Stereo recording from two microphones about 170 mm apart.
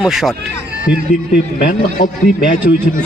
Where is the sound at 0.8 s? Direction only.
55° left (ahead or behind).